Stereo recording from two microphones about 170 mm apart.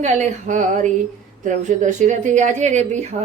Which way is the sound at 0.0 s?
45° right (ahead or behind).